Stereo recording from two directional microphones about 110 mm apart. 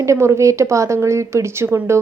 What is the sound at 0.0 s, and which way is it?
A woman's voice, 25° right (ahead or behind).